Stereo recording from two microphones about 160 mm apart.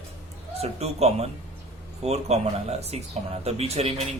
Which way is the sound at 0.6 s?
40° right (ahead or behind).